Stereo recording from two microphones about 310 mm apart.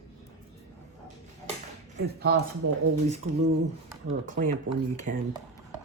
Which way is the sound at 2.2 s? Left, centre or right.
Right.